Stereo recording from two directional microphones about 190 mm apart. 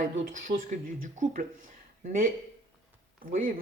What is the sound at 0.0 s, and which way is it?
Speech, 45° right (ahead or behind).